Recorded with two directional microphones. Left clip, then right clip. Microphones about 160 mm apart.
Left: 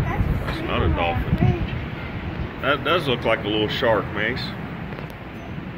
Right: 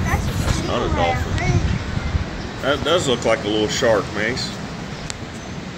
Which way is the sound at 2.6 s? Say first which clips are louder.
Right 2 dB; 40° right (ahead or behind).